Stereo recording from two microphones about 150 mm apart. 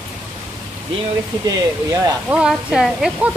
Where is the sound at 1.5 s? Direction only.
25° right (ahead or behind).